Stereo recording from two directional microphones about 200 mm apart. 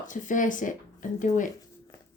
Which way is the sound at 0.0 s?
40° left (ahead or behind).